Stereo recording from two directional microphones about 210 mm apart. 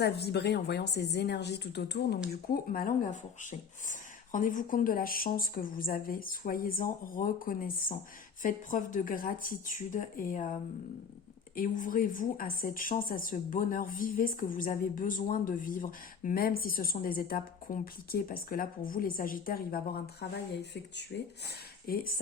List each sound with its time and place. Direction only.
0.0 s a woman's voice: 50° left (ahead or behind)
11.5 s a woman's voice: 40° left (ahead or behind)